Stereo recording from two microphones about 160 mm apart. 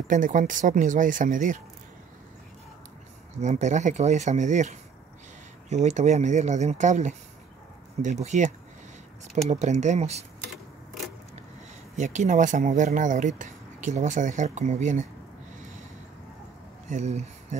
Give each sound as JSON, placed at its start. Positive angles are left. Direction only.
{"t": 0.1, "sound": "speech", "side_deg": -50}
{"t": 3.3, "sound": "speech", "side_deg": -45}
{"t": 12.0, "sound": "speech", "side_deg": -50}
{"t": 16.9, "sound": "speech", "side_deg": -45}